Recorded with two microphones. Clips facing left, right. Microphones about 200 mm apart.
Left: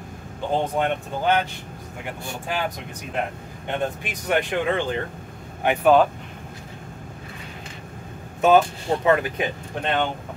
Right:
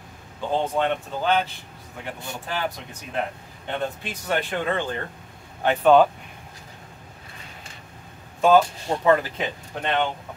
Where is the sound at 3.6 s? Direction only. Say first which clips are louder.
Left 2 dB; 15° left (ahead or behind).